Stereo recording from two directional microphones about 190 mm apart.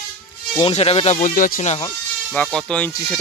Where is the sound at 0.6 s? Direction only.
30° left (ahead or behind).